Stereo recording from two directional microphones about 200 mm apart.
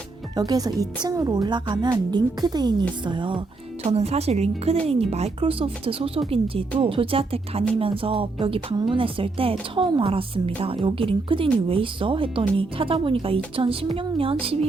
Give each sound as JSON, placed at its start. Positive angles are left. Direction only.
{"t": 0.3, "sound": "speech", "side_deg": -20}